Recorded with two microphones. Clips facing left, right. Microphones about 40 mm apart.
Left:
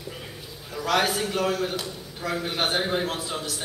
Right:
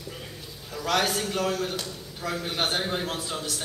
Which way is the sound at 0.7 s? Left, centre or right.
Centre.